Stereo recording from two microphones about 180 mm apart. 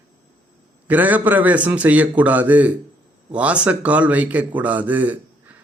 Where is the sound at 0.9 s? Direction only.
10° right (ahead or behind).